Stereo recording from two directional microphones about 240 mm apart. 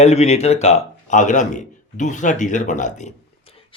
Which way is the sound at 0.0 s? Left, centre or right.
Left.